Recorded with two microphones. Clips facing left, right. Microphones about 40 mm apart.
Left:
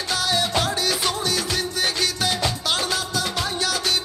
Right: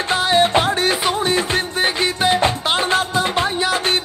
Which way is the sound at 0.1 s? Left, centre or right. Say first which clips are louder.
Right 7 dB; right.